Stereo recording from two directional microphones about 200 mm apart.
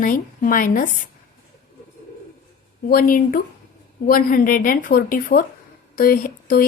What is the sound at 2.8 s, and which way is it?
A woman's voice, 45° left (ahead or behind).